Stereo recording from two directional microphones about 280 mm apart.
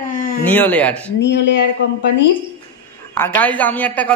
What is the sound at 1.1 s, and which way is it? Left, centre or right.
Speech, left.